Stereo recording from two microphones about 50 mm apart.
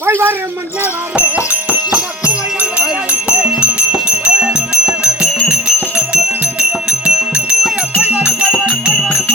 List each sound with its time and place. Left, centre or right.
0.0 s a sound: right
1.1 s music: right
6.6 s music: right